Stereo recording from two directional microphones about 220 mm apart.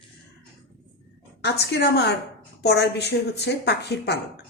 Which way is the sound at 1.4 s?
50° left (ahead or behind).